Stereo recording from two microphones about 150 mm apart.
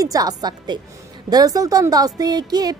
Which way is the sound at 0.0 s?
25° right (ahead or behind).